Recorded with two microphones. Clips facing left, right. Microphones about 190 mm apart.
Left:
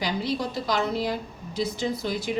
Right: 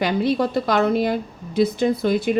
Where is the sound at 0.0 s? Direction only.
60° right (ahead or behind).